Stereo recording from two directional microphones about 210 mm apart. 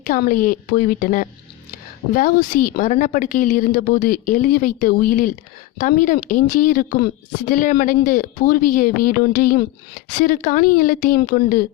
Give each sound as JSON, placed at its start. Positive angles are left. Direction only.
{"t": 0.1, "sound": "a woman's voice", "side_deg": 40}